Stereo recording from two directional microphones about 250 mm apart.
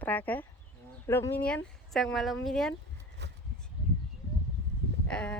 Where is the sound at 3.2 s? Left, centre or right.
Right.